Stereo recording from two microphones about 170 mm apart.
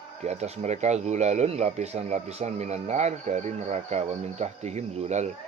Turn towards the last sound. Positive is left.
turn(degrees=-40)  # may be behind; listen again after turning